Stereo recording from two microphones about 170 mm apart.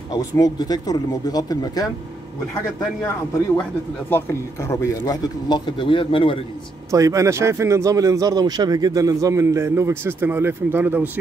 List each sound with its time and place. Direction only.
0.1 s speech: 25° left (ahead or behind)
4.1 s speech: 15° left (ahead or behind)
6.9 s a man's voice: 20° right (ahead or behind)